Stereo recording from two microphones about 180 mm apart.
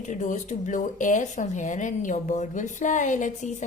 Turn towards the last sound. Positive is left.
turn(degrees=45)  # may be behind; listen again after turning